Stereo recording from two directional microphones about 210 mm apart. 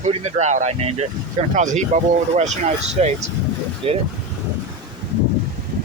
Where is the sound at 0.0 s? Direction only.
30° right (ahead or behind).